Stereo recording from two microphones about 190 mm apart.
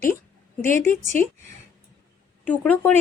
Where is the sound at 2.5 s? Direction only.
10° left (ahead or behind).